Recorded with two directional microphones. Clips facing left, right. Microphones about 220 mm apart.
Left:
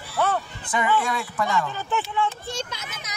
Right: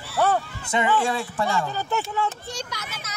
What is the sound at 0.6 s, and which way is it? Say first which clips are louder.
Speech: right 1 dB; 25° right (ahead or behind).